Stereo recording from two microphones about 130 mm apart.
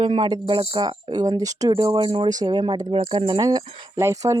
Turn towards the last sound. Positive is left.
turn(degrees=-25)  # may be behind; listen again after turning